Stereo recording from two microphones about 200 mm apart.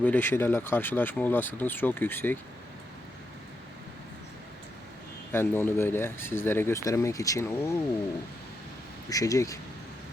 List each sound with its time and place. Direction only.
0.0 s speech: 10° left (ahead or behind)
5.3 s speech: 10° left (ahead or behind)
9.0 s speech: 15° left (ahead or behind)